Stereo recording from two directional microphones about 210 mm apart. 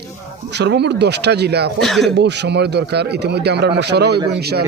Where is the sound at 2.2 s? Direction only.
55° right (ahead or behind).